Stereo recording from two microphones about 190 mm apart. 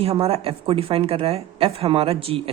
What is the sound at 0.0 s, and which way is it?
A woman's voice, 30° right (ahead or behind).